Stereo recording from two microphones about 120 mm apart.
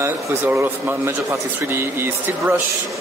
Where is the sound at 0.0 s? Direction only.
20° right (ahead or behind).